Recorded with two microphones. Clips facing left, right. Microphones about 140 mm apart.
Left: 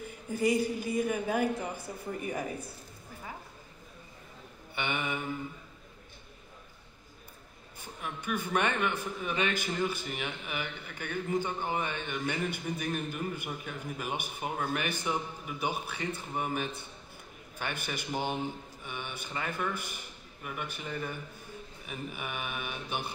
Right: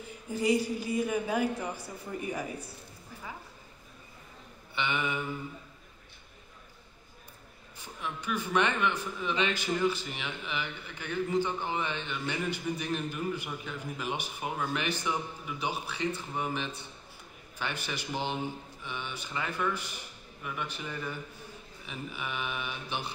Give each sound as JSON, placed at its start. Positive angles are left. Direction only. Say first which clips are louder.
{"t": 0.3, "sound": "a man's voice", "louder": "even", "side_deg": 50}
{"t": 4.7, "sound": "a man's voice", "louder": "right 2 dB", "side_deg": 50}
{"t": 7.8, "sound": "a man's voice", "louder": "right 1 dB", "side_deg": 50}